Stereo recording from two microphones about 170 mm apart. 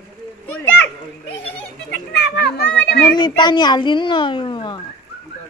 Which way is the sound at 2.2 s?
90° left.